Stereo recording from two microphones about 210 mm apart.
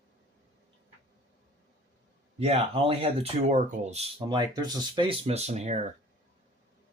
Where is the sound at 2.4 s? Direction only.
30° right (ahead or behind).